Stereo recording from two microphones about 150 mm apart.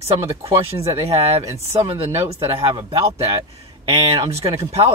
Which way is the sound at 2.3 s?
35° right (ahead or behind).